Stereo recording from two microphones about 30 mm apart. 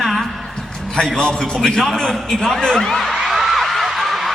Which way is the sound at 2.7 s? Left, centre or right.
Centre.